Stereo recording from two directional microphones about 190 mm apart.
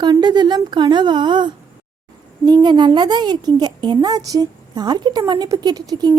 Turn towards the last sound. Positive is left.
turn(degrees=-20)  # may be behind; listen again after turning